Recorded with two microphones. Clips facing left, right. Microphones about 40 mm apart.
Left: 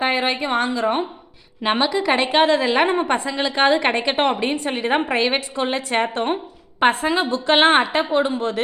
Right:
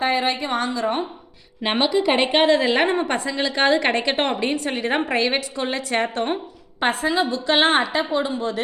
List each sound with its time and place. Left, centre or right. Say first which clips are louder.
0.0 s a woman's voice: left 1 dB; left
1.6 s a woman's voice: even; centre
2.4 s a woman's voice: left 2 dB; centre
2.8 s a woman's voice: left 2 dB; centre; by 8.6 s left